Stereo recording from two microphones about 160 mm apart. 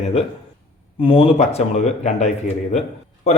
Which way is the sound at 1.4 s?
45° left (ahead or behind).